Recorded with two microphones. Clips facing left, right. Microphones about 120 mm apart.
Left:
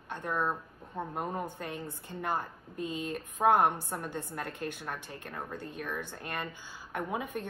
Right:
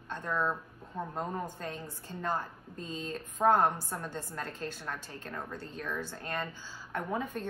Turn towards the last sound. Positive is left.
turn(degrees=15)  # may be behind; listen again after turning